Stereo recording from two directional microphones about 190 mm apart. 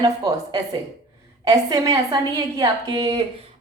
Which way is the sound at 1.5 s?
20° right (ahead or behind).